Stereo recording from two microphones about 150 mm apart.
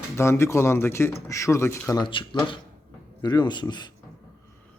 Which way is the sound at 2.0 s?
35° left (ahead or behind).